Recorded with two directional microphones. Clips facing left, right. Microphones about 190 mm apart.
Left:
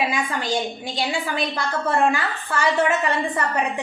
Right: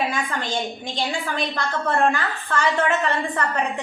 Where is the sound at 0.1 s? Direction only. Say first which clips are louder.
Left 2 dB; 15° left (ahead or behind).